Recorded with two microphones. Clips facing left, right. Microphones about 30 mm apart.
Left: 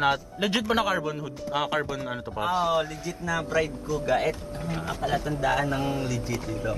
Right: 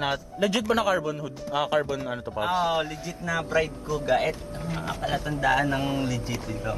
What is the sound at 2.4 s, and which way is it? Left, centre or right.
Speech, centre.